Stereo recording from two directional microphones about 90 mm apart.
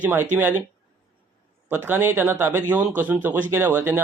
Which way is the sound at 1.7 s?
25° right (ahead or behind).